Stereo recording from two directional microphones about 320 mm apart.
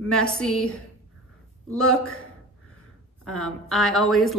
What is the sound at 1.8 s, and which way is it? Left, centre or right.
Speech, left.